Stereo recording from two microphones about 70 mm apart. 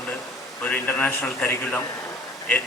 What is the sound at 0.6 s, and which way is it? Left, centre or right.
A man's voice, left.